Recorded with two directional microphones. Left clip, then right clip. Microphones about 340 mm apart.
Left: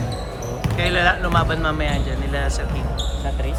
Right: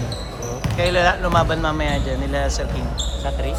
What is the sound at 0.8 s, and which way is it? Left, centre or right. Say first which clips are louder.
A man's voice: right 1 dB; centre.